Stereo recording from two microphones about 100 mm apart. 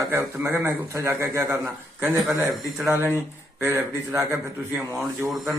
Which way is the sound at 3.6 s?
25° right (ahead or behind).